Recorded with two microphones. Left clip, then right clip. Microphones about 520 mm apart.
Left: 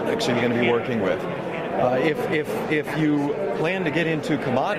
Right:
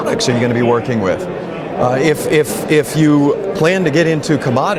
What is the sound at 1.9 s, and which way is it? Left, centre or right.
A man's voice, right.